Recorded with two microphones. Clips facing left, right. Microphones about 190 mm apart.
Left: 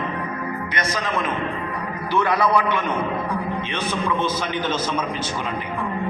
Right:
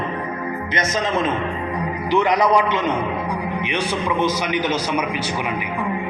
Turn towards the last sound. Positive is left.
turn(degrees=-15)  # may be behind; listen again after turning